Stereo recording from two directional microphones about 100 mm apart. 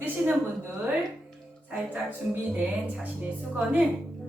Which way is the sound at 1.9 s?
15° right (ahead or behind).